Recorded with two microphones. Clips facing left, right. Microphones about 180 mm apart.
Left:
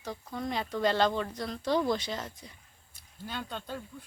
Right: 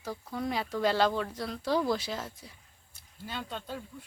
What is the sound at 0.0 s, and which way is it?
A woman's voice, 5° right (ahead or behind).